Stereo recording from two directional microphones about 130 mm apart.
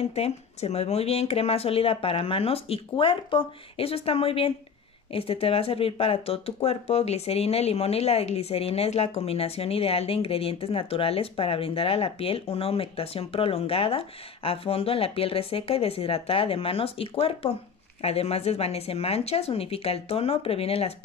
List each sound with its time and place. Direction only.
0.0 s speech: 55° left (ahead or behind)